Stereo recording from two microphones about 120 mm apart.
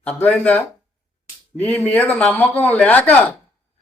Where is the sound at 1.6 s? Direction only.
15° left (ahead or behind).